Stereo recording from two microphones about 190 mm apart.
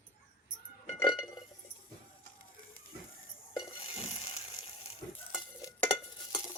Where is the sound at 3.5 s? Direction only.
25° left (ahead or behind).